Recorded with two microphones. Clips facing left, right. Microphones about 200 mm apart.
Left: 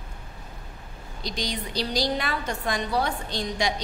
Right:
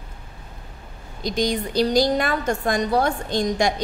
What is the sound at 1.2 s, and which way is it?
A woman's voice, 50° right (ahead or behind).